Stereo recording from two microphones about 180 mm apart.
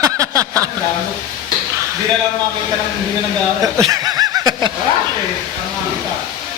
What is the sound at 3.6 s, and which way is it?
Chuckle, 20° right (ahead or behind).